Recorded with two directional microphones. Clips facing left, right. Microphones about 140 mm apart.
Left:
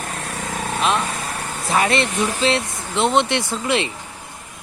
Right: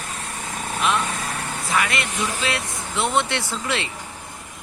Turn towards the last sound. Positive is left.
turn(degrees=20)  # may be behind; listen again after turning